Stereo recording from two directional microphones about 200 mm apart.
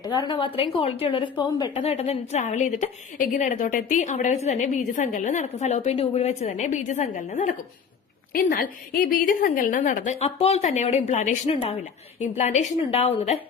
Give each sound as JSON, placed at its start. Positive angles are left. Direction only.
{"t": 0.0, "sound": "a woman's voice", "side_deg": 20}
{"t": 1.8, "sound": "a woman's voice", "side_deg": 30}